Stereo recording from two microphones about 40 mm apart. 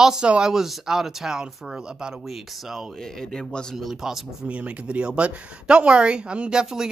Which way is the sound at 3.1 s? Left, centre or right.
Centre.